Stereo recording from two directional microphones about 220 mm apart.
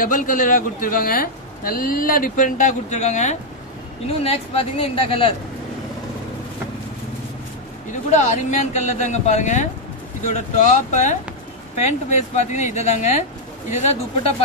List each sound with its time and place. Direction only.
0.0 s a man's voice: 35° left (ahead or behind)
8.1 s a man's voice: 35° left (ahead or behind)
12.4 s a man's voice: 30° left (ahead or behind)